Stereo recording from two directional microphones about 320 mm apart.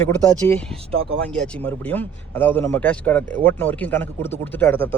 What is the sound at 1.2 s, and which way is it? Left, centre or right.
Speech, centre.